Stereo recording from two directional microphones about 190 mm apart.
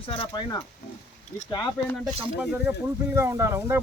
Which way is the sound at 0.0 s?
30° left (ahead or behind).